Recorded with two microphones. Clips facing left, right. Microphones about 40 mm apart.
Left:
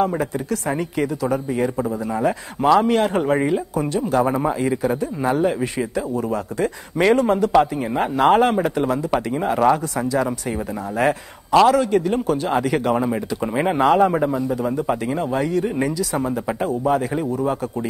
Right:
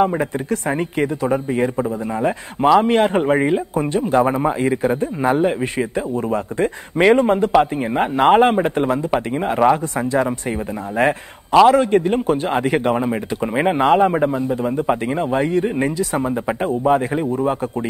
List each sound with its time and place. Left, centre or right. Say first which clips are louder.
0.2 s a man's voice: right 2 dB; right